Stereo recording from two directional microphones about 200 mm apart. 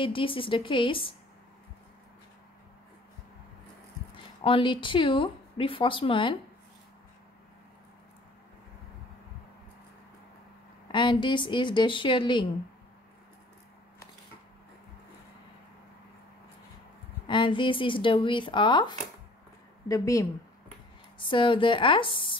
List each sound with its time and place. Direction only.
0.0 s speech: 25° left (ahead or behind)
4.4 s speech: 25° left (ahead or behind)
10.9 s speech: 25° left (ahead or behind)
17.3 s speech: 25° left (ahead or behind)
21.3 s speech: 25° left (ahead or behind)